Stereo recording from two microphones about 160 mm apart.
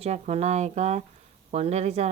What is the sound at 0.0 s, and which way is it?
A woman's voice, 40° right (ahead or behind).